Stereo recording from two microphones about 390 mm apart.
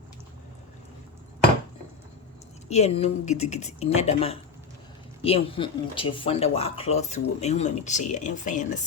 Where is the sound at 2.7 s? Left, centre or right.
Centre.